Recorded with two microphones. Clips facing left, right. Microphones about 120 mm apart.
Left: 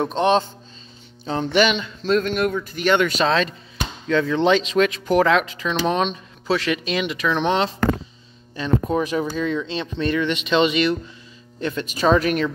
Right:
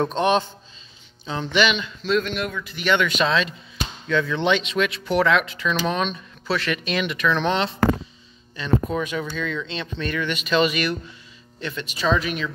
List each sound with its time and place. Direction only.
0.0 s speech: 25° left (ahead or behind)
1.2 s speech: 40° left (ahead or behind); by 7.6 s 20° left (ahead or behind)
8.5 s speech: 35° left (ahead or behind)
11.6 s speech: 45° left (ahead or behind)